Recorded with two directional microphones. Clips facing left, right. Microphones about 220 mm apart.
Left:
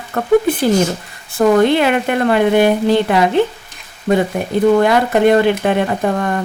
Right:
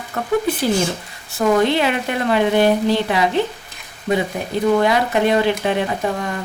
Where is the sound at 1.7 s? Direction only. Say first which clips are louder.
Left 5 dB; 55° left (ahead or behind).